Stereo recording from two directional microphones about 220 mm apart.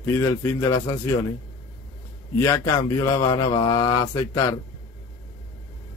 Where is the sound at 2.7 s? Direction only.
15° left (ahead or behind).